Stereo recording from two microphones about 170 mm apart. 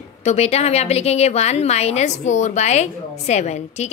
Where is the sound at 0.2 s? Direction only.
40° left (ahead or behind).